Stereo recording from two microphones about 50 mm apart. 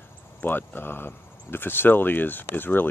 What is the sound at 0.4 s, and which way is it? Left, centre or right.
Speech, left.